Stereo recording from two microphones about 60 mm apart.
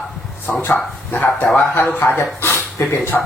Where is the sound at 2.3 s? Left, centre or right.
Left.